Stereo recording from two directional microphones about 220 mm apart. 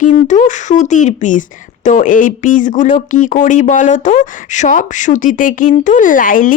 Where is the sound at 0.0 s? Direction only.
35° left (ahead or behind).